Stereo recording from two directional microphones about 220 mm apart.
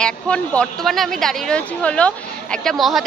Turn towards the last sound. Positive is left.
turn(degrees=0)  # may be behind; listen again after turning